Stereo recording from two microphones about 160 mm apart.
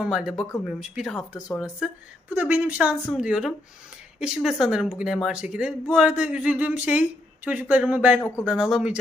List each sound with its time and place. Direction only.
0.0 s speech: 5° right (ahead or behind)
8.2 s speech: 15° left (ahead or behind)
8.4 s speech: 5° right (ahead or behind)